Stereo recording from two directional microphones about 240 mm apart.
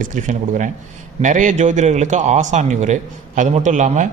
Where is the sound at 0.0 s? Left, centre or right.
Right.